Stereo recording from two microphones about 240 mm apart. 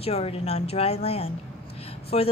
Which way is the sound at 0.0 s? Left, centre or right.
Left.